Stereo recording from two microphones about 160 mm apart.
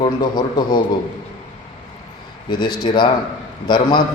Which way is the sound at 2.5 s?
30° left (ahead or behind).